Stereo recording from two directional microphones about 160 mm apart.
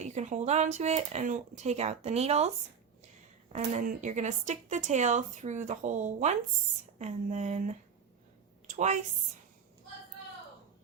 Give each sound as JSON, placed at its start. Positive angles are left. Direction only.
{"t": 0.0, "sound": "speech", "side_deg": -45}
{"t": 3.5, "sound": "a woman's voice", "side_deg": -50}